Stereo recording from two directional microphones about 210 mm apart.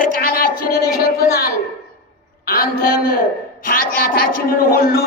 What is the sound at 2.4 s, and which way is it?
A man's voice, 45° left (ahead or behind).